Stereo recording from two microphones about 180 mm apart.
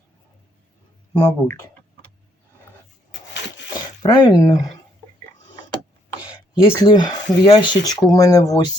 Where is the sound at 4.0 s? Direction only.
25° left (ahead or behind).